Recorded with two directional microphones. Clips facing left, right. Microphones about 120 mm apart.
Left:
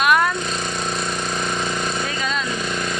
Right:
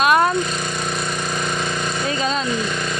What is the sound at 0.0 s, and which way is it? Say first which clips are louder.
Lawn mower: right 2 dB; 25° right (ahead or behind).